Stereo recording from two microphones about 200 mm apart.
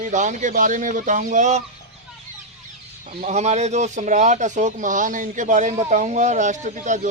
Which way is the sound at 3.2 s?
35° right (ahead or behind).